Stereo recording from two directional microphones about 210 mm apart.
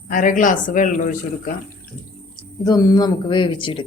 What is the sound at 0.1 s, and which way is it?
A woman's voice, 40° left (ahead or behind).